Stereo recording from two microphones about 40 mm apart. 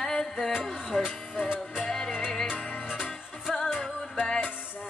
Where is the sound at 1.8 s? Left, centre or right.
Centre.